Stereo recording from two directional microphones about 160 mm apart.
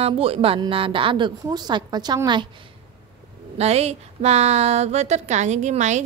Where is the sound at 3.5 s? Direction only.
40° right (ahead or behind).